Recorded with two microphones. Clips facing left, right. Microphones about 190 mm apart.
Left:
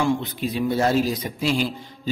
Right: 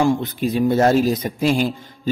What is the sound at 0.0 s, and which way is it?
A man's voice, 45° right (ahead or behind).